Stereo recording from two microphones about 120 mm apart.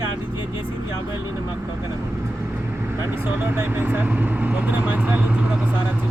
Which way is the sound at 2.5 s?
15° right (ahead or behind).